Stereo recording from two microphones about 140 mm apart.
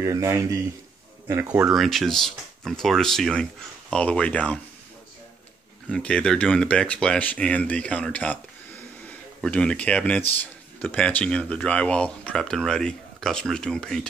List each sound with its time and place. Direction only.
0.0 s speech: 20° right (ahead or behind)
1.5 s speech: 5° right (ahead or behind)
5.9 s speech: 5° left (ahead or behind)
9.4 s speech: 5° left (ahead or behind)